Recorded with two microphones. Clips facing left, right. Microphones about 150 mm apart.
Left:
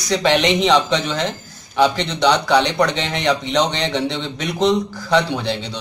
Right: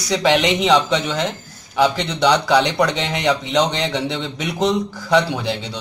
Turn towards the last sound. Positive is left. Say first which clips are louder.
# left 1 dB
turn(degrees=-10)  # may be behind; listen again after turning